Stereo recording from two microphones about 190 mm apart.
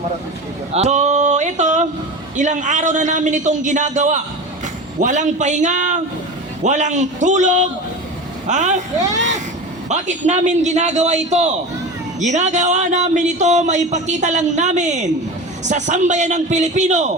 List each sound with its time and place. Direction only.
0.7 s a sound: 35° right (ahead or behind)
2.3 s speech: 40° right (ahead or behind)
9.9 s speech: 40° right (ahead or behind)